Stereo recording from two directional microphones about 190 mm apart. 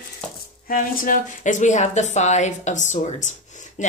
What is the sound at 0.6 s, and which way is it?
A woman's voice, 45° left (ahead or behind).